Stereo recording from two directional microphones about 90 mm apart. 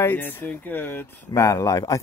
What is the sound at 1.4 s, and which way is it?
Speech, 35° left (ahead or behind).